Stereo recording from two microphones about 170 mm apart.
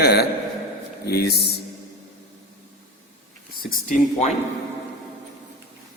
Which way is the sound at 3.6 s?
50° left (ahead or behind).